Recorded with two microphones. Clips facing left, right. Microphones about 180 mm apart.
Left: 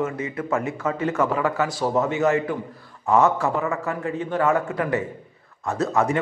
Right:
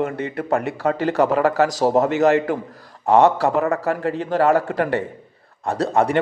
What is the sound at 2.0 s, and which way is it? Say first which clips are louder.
Speech: right 4 dB; 70° right (ahead or behind).